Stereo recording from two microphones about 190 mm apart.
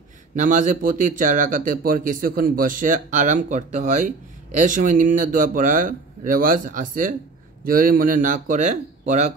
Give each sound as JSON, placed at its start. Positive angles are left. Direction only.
{"t": 0.4, "sound": "speech", "side_deg": -40}